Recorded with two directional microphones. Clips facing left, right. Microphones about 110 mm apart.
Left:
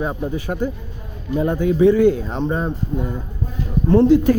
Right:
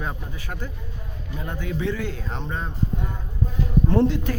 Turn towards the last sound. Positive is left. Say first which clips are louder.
# left 10 dB
turn(degrees=10)  # may be behind; listen again after turning